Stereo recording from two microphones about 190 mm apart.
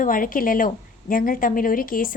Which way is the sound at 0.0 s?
45° left (ahead or behind).